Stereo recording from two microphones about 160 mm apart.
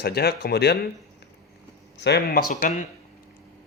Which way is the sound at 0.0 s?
80° left.